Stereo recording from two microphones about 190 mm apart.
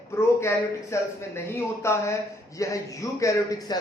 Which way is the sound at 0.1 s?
15° left (ahead or behind).